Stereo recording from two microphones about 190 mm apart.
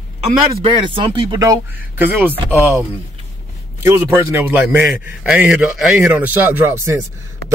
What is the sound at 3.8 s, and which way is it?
Speech, 15° right (ahead or behind).